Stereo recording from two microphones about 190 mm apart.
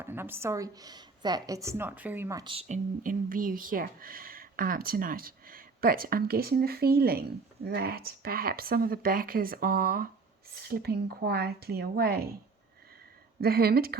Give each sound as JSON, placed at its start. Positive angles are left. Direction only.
{"t": 0.0, "sound": "speech", "side_deg": -10}
{"t": 2.4, "sound": "speech", "side_deg": -30}
{"t": 13.4, "sound": "speech", "side_deg": -55}